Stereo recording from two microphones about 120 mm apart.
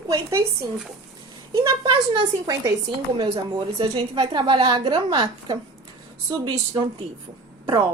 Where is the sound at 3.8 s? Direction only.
40° right (ahead or behind).